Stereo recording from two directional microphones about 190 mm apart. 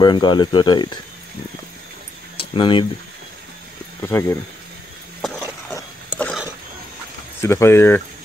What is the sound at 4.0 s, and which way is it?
Speech, 15° left (ahead or behind).